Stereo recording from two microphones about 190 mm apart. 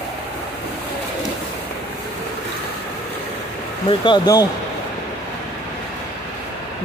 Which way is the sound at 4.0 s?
20° left (ahead or behind).